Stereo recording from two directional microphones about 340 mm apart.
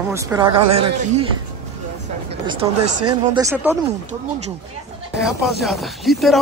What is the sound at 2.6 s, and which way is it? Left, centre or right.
Speech, centre.